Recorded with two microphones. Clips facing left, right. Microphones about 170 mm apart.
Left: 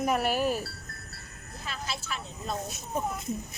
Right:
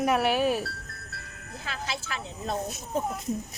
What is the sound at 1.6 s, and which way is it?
Music, 90° right.